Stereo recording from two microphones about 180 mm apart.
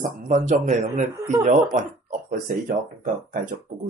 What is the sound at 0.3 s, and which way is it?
Speech, 40° right (ahead or behind).